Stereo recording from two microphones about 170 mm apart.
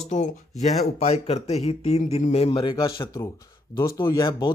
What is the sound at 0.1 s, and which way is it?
Speech, 45° left (ahead or behind).